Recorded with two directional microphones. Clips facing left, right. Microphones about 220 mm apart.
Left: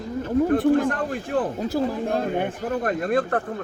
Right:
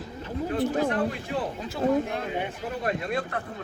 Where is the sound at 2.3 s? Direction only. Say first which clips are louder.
Left 6 dB; 50° left (ahead or behind).